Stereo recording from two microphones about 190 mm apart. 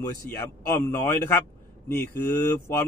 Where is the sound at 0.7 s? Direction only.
10° left (ahead or behind).